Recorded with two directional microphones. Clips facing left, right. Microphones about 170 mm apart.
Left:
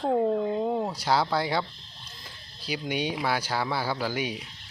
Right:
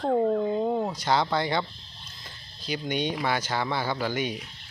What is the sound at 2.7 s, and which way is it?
A man's voice, 5° left (ahead or behind).